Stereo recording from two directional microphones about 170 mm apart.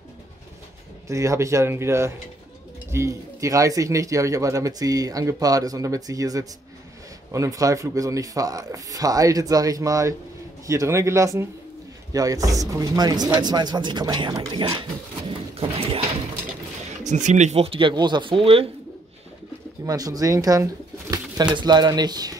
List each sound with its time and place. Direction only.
1.0 s speech: 20° right (ahead or behind)
17.0 s speech: 45° right (ahead or behind)
19.9 s speech: 20° right (ahead or behind)